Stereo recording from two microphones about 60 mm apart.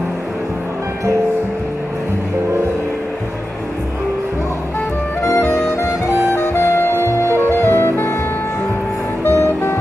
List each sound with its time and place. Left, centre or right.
5.2 s music: left
9.2 s music: left